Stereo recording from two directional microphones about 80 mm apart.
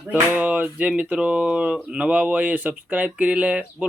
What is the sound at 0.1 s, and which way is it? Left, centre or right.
Speech, centre.